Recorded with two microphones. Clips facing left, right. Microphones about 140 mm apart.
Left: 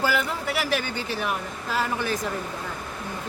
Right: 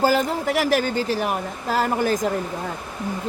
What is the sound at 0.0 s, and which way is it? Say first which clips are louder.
Speech: right 6 dB; 40° right (ahead or behind).